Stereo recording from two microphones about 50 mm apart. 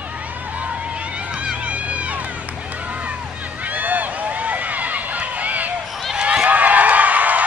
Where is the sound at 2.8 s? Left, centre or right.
Right.